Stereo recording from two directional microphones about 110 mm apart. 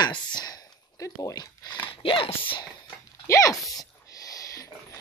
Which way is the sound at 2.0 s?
50° left (ahead or behind).